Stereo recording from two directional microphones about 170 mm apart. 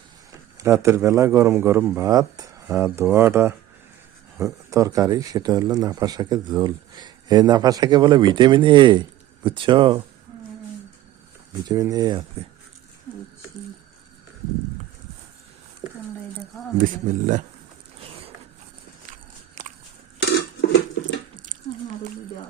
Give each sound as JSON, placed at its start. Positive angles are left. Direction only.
{"t": 0.5, "sound": "a man's voice", "side_deg": -15}
{"t": 11.7, "sound": "speech", "side_deg": -20}
{"t": 16.8, "sound": "speech", "side_deg": -45}
{"t": 19.1, "sound": "biting", "side_deg": -50}
{"t": 21.5, "sound": "a sound", "side_deg": -50}